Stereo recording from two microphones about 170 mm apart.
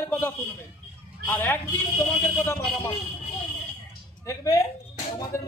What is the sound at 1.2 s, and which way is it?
A man's voice, 10° left (ahead or behind).